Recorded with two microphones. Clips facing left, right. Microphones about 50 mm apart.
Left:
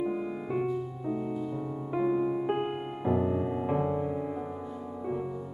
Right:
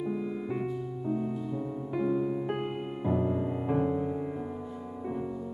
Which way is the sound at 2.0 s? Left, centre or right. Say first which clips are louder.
Left 2 dB; left.